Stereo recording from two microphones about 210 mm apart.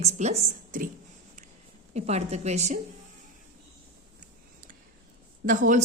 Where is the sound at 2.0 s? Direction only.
30° right (ahead or behind).